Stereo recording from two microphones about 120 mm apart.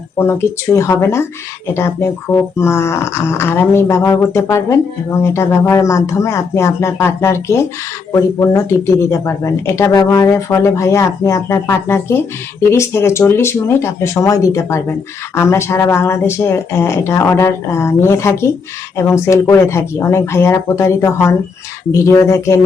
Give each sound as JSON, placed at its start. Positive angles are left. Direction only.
{"t": 0.2, "sound": "speech", "side_deg": 20}